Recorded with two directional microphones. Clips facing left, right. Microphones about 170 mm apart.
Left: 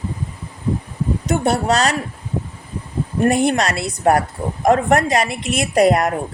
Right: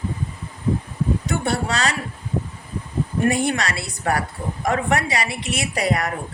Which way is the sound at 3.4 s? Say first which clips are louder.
Left 6 dB; 45° left (ahead or behind).